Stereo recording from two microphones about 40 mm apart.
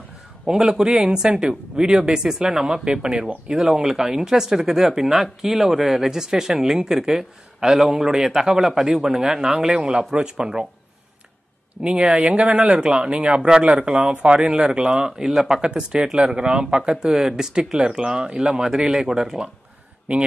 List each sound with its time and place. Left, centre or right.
0.5 s speech: centre
9.9 s speech: right
11.8 s speech: right
18.7 s speech: centre